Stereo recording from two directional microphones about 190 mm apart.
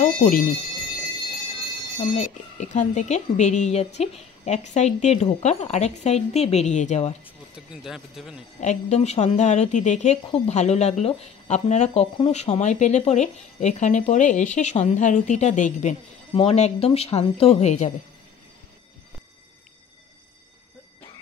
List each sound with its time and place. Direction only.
0.0 s speech: 45° left (ahead or behind)
2.1 s speech: 40° left (ahead or behind)
7.5 s speech: 5° right (ahead or behind)
8.5 s speech: 35° left (ahead or behind)